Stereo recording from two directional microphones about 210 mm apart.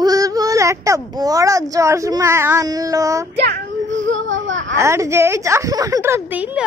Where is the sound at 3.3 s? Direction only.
55° right (ahead or behind).